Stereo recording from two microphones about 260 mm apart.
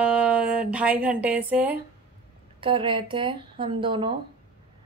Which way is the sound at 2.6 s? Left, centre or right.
Centre.